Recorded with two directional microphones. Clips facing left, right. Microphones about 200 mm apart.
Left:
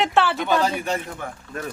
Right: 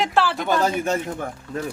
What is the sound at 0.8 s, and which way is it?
Speech, 45° right (ahead or behind).